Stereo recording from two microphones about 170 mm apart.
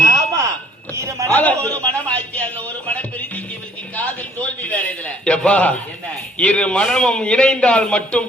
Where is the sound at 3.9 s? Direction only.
10° left (ahead or behind).